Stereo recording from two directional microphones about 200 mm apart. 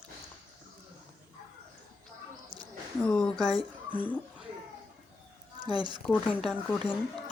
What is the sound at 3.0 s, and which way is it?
Speech, 5° left (ahead or behind).